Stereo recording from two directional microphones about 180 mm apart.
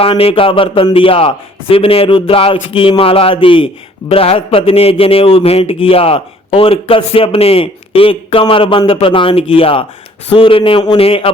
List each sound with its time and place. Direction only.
0.0 s a man's voice: 30° left (ahead or behind)